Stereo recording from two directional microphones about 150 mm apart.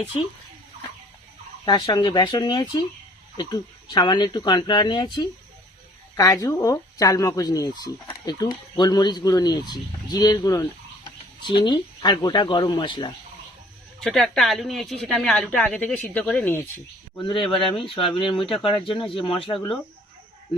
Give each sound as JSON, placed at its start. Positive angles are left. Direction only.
{"t": 1.6, "sound": "speech", "side_deg": 30}
{"t": 14.0, "sound": "speech", "side_deg": 0}
{"t": 17.2, "sound": "speech", "side_deg": 35}